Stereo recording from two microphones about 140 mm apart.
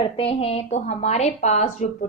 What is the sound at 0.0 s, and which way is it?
A woman's voice, 45° left (ahead or behind).